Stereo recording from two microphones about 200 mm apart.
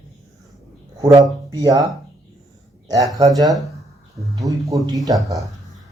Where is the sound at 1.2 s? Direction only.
20° right (ahead or behind).